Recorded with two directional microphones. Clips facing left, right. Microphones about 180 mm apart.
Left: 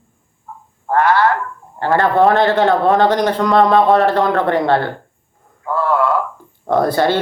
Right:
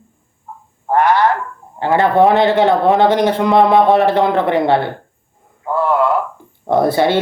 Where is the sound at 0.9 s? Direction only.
20° right (ahead or behind).